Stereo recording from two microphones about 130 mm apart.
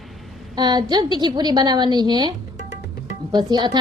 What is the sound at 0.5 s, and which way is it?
Speech, 35° right (ahead or behind).